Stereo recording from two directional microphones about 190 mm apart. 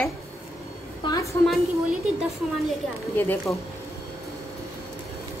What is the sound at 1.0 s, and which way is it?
Speech, 20° left (ahead or behind).